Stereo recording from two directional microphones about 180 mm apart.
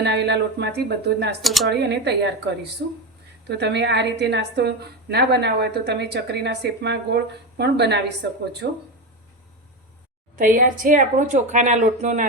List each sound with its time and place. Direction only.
0.0 s a woman's voice: 70° right (ahead or behind)
1.4 s speech: centre (ahead or behind)
1.8 s a woman's voice: 70° right (ahead or behind)
3.6 s a woman's voice: 70° right (ahead or behind)
8.6 s speech: 55° right (ahead or behind)
10.3 s speech: 50° right (ahead or behind)